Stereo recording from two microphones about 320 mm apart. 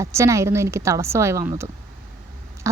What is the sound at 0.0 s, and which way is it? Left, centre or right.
Speech, centre.